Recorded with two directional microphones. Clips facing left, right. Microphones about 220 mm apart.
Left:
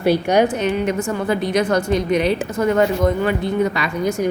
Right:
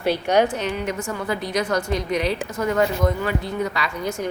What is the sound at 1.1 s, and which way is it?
Speech, 25° left (ahead or behind).